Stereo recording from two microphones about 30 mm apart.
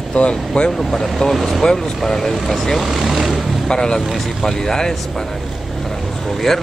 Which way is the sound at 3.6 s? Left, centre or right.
Left.